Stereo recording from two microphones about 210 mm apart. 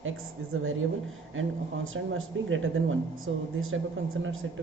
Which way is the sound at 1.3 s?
70° right (ahead or behind).